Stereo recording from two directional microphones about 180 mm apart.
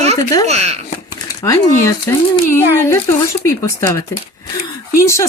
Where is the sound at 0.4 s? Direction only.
40° right (ahead or behind).